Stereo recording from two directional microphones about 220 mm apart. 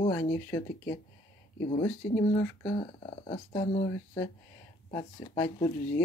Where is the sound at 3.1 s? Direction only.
30° left (ahead or behind).